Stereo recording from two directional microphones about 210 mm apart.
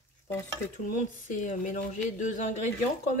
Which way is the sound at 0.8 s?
35° left (ahead or behind).